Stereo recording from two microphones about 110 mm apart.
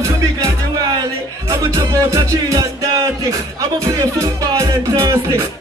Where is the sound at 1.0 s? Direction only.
30° right (ahead or behind).